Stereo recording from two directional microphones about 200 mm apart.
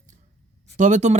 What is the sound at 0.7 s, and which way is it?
Speech, 35° right (ahead or behind).